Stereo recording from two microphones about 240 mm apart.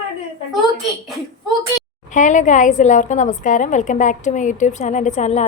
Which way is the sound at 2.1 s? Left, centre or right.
Left.